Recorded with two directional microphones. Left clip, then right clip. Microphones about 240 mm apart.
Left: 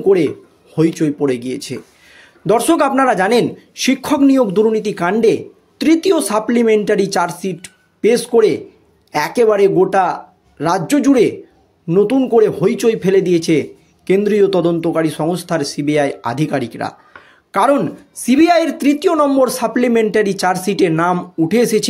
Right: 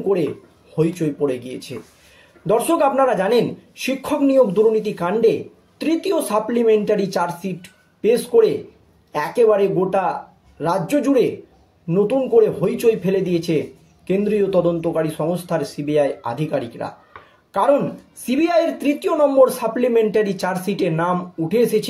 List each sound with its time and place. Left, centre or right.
0.7 s speech: left